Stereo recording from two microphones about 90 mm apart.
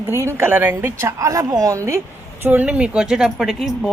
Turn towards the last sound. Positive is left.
turn(degrees=0)  # may be behind; listen again after turning